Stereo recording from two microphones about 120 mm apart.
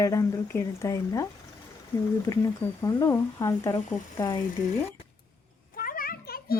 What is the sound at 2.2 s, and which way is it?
Speech, 30° left (ahead or behind).